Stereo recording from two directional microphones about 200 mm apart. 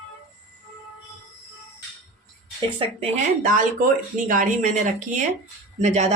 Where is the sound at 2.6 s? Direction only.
25° right (ahead or behind).